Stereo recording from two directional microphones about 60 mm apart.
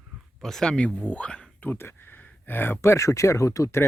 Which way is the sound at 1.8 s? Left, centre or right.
Left.